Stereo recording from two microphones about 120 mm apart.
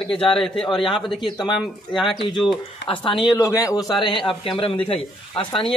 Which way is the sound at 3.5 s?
30° left (ahead or behind).